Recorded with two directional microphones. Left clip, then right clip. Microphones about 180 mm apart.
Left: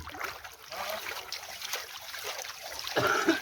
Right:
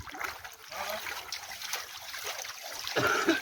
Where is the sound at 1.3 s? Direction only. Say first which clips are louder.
Even; 35° left (ahead or behind).